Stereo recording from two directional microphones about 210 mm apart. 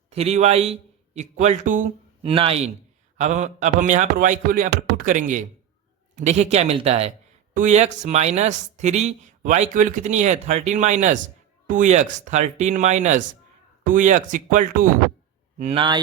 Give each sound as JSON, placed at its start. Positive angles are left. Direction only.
{"t": 0.1, "sound": "a man's voice", "side_deg": -30}
{"t": 2.3, "sound": "a man's voice", "side_deg": -25}